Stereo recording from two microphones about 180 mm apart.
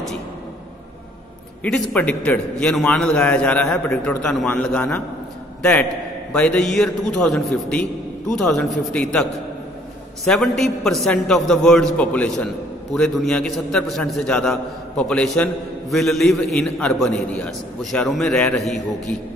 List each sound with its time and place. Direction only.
1.6 s a man's voice: 10° left (ahead or behind)